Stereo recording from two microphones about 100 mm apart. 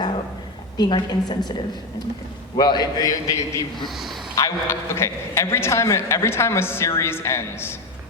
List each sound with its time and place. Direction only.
0.8 s a woman's voice: 50° left (ahead or behind)
3.8 s a man's voice: centre (ahead or behind)
4.4 s a man's voice: 30° left (ahead or behind)